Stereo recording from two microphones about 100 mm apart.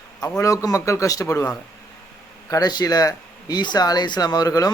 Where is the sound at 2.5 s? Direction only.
40° left (ahead or behind).